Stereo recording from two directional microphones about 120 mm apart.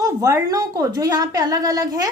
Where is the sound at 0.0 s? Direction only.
25° right (ahead or behind).